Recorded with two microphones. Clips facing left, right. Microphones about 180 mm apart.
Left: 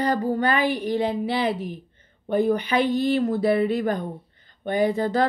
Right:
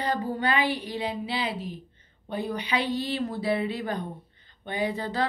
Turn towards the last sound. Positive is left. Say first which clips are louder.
# left 7 dB
turn(degrees=45)  # may be behind; listen again after turning